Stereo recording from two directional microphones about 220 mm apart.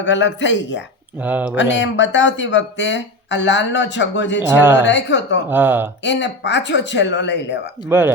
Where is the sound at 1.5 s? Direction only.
55° left (ahead or behind).